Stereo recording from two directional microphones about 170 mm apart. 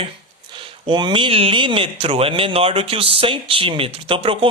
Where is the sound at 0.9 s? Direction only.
25° right (ahead or behind).